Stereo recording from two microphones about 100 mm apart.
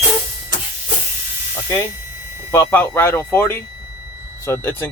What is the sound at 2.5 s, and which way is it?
Speech, 25° left (ahead or behind).